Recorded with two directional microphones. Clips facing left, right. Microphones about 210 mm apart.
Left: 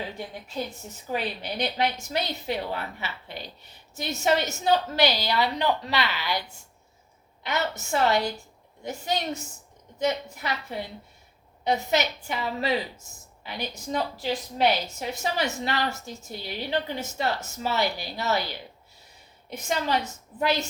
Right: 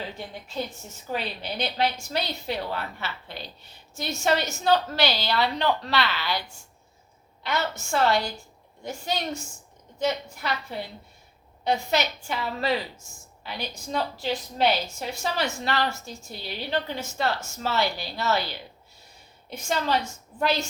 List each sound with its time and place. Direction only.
1.1 s a woman's voice: 15° left (ahead or behind)
7.4 s a woman's voice: 20° left (ahead or behind)
11.9 s a woman's voice: 20° left (ahead or behind)
19.5 s a woman's voice: 20° left (ahead or behind)